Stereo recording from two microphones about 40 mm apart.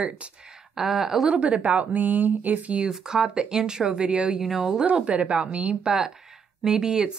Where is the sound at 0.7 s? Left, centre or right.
Centre.